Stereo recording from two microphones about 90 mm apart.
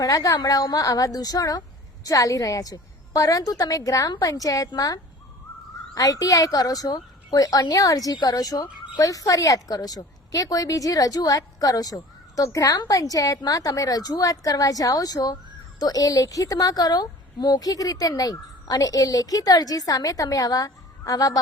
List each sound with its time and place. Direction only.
0.0 s a woman's voice: 40° left (ahead or behind)